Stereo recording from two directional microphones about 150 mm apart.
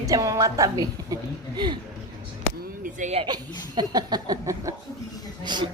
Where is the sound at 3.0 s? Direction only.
50° right (ahead or behind).